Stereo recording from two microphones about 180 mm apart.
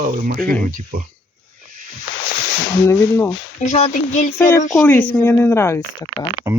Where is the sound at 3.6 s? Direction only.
40° left (ahead or behind).